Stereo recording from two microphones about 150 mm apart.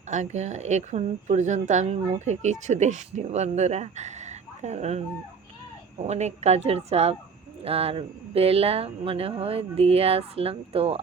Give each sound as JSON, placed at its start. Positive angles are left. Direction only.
{"t": 0.1, "sound": "a woman's voice", "side_deg": -50}